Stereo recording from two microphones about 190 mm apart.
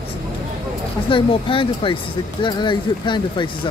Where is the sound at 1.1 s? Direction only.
25° left (ahead or behind).